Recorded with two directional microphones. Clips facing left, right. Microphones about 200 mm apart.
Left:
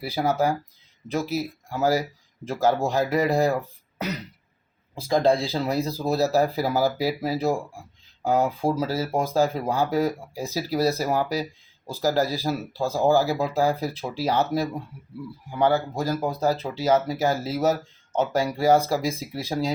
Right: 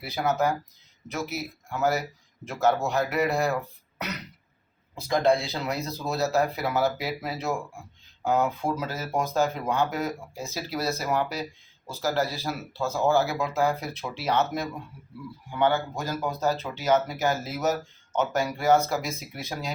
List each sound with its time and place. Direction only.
0.0 s speech: 30° left (ahead or behind)